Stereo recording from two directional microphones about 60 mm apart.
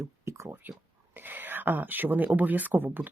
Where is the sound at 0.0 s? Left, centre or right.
Right.